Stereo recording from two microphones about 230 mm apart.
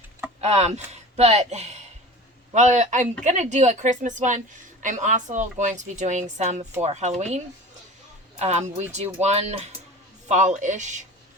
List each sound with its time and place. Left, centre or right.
0.4 s a woman's voice: right